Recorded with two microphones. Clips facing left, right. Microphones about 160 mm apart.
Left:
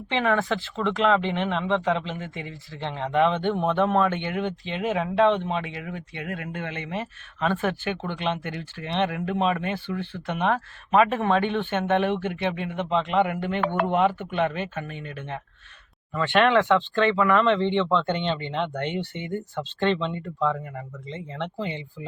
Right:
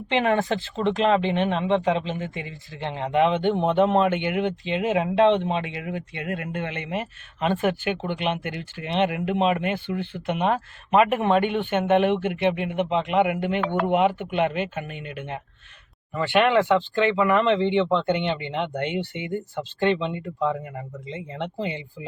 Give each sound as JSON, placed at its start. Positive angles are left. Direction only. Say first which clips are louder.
{"t": 0.3, "sound": "speech", "louder": "right 1 dB", "side_deg": -20}